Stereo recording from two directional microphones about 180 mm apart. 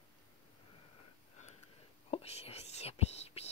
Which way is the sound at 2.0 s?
35° left (ahead or behind).